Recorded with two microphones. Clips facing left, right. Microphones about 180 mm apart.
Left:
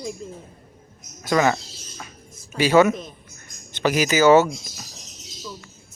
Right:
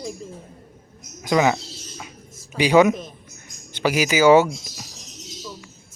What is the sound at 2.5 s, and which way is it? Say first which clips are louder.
Speech: right 1 dB; 15° right (ahead or behind).